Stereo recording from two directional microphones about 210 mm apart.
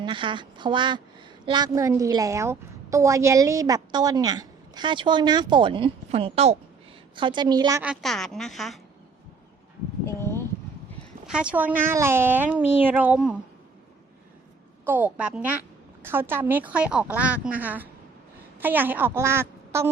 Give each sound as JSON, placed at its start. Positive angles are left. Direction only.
{"t": 0.0, "sound": "a woman's voice", "side_deg": -25}
{"t": 7.8, "sound": "a woman's voice", "side_deg": 0}
{"t": 10.1, "sound": "a sound", "side_deg": 10}
{"t": 11.3, "sound": "a woman's voice", "side_deg": -5}
{"t": 14.8, "sound": "a woman's voice", "side_deg": -10}